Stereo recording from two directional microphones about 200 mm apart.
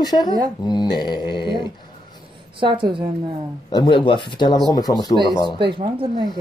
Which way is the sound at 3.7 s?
20° left (ahead or behind).